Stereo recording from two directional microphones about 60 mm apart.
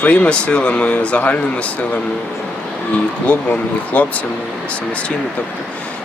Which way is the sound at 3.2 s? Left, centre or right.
Left.